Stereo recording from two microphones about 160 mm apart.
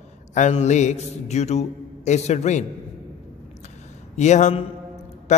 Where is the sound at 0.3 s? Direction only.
45° left (ahead or behind).